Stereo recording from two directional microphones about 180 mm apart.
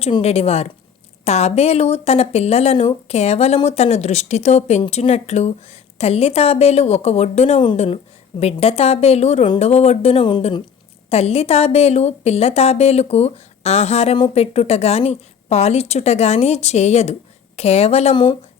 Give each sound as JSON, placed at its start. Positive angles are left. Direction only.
{"t": 0.0, "sound": "a woman's voice", "side_deg": 35}